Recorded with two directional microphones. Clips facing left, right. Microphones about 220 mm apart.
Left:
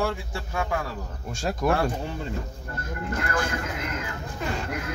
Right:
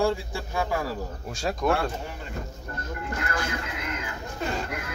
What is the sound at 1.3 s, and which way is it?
Speech, centre (ahead or behind).